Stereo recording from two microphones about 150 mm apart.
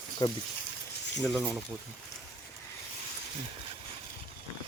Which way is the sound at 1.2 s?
Centre (ahead or behind).